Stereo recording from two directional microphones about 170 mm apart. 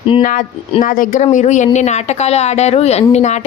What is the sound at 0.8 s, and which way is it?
Speech, 50° left (ahead or behind).